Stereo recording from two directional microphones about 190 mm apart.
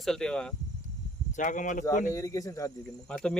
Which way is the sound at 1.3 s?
45° left (ahead or behind).